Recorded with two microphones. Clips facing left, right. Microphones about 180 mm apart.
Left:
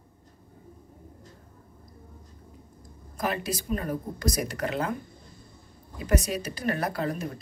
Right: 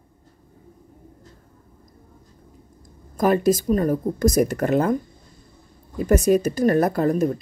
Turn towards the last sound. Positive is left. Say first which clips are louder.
# right 10 dB
turn(degrees=-45)  # may be behind; listen again after turning